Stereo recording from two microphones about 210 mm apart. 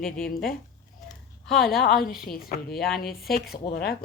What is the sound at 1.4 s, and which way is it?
Speech, centre (ahead or behind).